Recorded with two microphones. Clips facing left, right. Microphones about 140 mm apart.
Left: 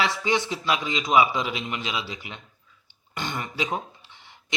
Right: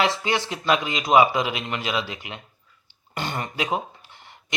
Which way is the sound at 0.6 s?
45° right (ahead or behind).